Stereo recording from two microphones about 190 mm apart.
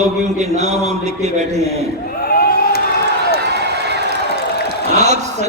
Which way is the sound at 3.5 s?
60° right (ahead or behind).